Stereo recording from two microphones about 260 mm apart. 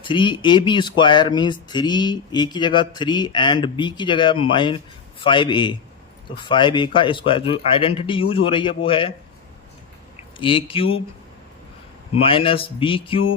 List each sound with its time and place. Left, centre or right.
0.0 s a man's voice: centre
10.4 s a man's voice: centre
12.1 s a man's voice: left